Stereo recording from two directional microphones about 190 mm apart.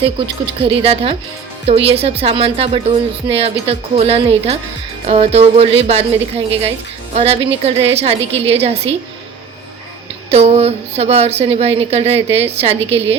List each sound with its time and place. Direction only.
0.6 s a woman's voice: 30° right (ahead or behind)
10.3 s a woman's voice: 30° right (ahead or behind)